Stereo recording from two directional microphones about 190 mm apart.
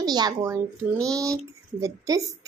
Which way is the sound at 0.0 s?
20° right (ahead or behind).